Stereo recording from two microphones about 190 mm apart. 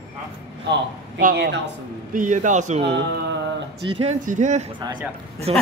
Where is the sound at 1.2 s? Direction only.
60° right (ahead or behind).